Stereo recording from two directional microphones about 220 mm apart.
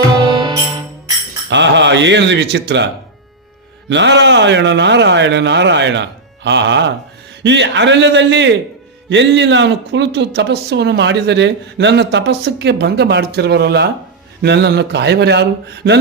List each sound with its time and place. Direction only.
0.2 s music: 20° right (ahead or behind)
1.5 s speech: 55° right (ahead or behind)